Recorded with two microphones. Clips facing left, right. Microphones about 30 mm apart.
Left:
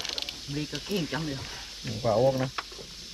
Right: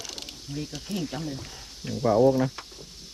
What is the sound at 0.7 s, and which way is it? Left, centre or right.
Speech, left.